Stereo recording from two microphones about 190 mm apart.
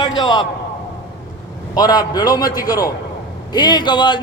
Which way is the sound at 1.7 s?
20° left (ahead or behind).